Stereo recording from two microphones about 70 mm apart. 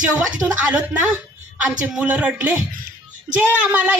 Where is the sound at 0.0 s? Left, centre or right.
Centre.